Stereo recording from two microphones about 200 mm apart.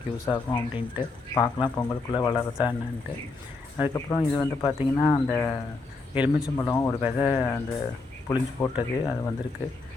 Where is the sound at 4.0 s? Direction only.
15° left (ahead or behind).